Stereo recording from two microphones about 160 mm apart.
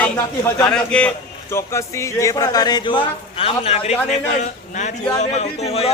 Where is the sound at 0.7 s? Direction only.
5° left (ahead or behind).